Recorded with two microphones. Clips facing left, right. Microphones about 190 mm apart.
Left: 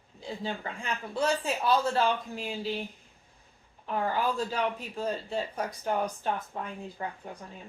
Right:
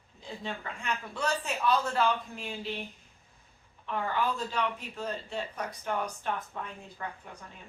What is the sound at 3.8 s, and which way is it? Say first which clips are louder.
A woman's voice: left 2 dB; 35° left (ahead or behind).